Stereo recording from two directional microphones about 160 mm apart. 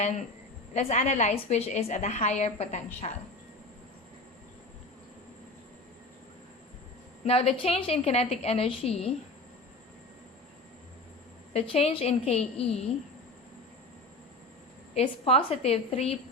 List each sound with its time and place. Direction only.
0.7 s a woman's voice: 45° left (ahead or behind)
7.3 s a woman's voice: 40° left (ahead or behind)
11.5 s a woman's voice: 35° left (ahead or behind)
14.9 s a woman's voice: 40° left (ahead or behind)